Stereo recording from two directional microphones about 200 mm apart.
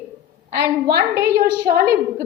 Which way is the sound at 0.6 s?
15° right (ahead or behind).